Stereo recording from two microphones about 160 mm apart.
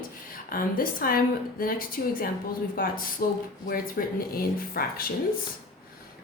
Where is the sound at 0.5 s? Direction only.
65° left (ahead or behind).